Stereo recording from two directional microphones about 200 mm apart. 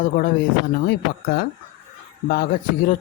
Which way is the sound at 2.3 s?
45° left (ahead or behind).